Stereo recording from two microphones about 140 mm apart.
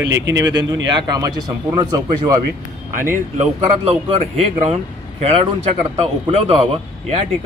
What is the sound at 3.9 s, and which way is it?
Speech, 45° right (ahead or behind).